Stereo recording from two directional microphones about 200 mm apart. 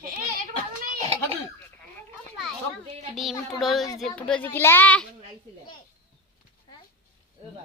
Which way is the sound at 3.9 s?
5° left (ahead or behind).